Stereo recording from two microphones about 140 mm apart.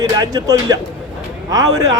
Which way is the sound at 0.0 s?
25° right (ahead or behind).